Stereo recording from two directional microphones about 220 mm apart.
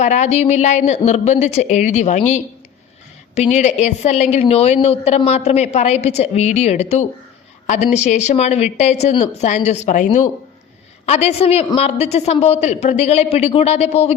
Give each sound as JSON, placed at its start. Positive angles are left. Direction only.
{"t": 0.0, "sound": "a woman's voice", "side_deg": 30}